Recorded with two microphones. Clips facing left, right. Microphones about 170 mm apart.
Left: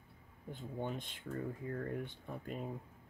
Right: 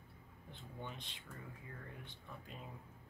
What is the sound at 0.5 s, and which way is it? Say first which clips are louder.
Speech: left 9 dB; 45° left (ahead or behind).